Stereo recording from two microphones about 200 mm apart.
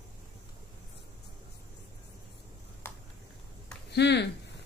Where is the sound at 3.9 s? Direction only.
55° left (ahead or behind).